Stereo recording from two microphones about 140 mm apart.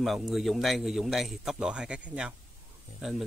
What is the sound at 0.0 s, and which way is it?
A man's voice, centre (ahead or behind).